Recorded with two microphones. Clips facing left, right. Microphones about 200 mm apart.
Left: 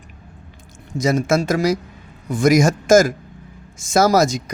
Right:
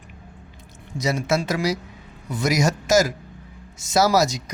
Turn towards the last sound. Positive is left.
turn(degrees=50)  # may be behind; listen again after turning